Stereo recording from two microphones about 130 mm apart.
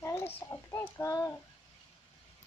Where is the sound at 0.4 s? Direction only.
20° left (ahead or behind).